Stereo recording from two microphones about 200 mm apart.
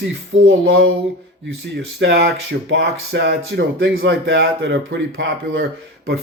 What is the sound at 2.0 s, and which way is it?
Speech, 55° right (ahead or behind).